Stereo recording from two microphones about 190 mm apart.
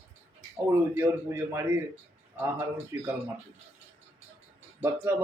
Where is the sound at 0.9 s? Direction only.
15° right (ahead or behind).